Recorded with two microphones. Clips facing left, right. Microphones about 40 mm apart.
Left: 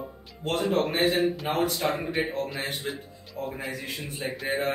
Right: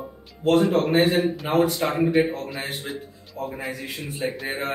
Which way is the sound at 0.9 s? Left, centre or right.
Centre.